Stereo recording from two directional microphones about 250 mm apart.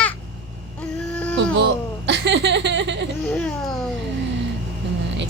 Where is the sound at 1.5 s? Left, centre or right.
Right.